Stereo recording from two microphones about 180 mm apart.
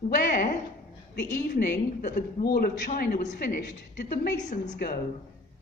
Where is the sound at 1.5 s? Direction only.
55° left (ahead or behind).